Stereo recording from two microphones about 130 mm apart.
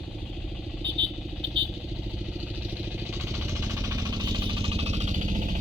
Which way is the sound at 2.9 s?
15° right (ahead or behind).